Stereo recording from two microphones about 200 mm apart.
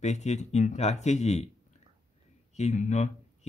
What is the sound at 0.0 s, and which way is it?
Speech, 35° left (ahead or behind).